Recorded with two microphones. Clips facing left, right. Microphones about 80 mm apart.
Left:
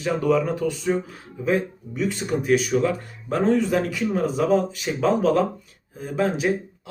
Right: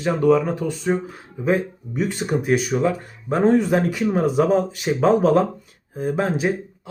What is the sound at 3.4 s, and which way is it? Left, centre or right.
Speech, right.